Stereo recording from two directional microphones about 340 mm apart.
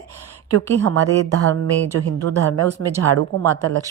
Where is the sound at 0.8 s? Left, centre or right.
Right.